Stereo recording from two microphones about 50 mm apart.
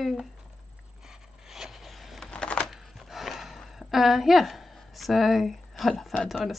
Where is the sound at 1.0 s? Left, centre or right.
Centre.